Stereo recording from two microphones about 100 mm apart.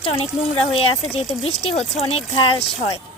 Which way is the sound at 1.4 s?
90° left.